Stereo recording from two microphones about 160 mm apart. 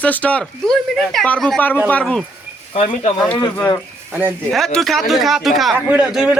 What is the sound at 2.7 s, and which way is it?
Speech, 40° left (ahead or behind).